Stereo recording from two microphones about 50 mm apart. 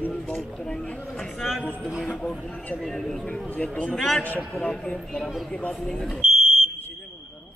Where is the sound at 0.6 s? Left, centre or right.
Centre.